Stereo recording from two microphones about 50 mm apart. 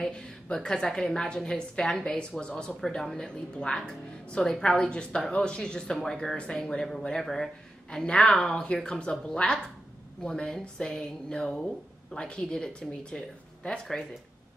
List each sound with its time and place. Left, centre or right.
0.0 s a woman's voice: centre
2.8 s a woman's voice: centre
6.3 s a woman's voice: centre